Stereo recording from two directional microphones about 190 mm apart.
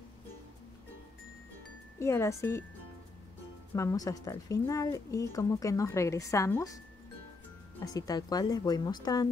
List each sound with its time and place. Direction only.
2.0 s a woman's voice: 15° left (ahead or behind)
3.7 s a woman's voice: 15° left (ahead or behind)
7.8 s a woman's voice: 20° left (ahead or behind)